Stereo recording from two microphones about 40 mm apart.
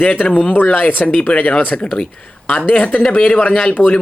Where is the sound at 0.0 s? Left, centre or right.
Left.